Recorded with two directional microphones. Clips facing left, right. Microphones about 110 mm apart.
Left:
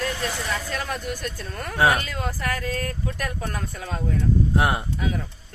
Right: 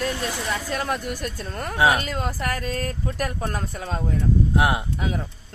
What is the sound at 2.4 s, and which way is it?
Speech, 30° right (ahead or behind).